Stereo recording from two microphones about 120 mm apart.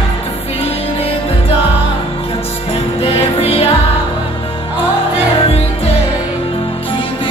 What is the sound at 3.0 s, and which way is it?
Music, 55° left (ahead or behind).